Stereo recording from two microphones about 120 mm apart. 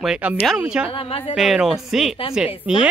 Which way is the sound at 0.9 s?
50° left (ahead or behind).